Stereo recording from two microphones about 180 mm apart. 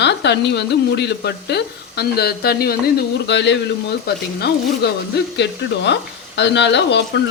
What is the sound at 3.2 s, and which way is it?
Speech, 80° left.